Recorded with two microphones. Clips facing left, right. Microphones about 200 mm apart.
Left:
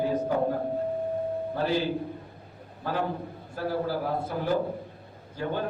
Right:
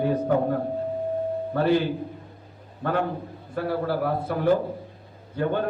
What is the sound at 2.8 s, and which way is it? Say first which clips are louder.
A man's voice: right 4 dB; 60° right (ahead or behind).